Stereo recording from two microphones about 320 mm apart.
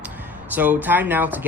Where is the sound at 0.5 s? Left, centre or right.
Centre.